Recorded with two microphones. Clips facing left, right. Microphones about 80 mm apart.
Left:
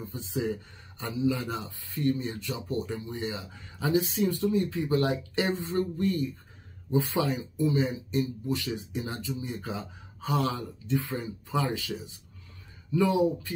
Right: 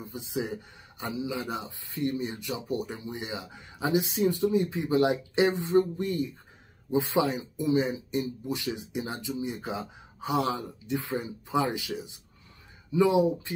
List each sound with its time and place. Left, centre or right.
0.0 s speech: centre
12.9 s speech: centre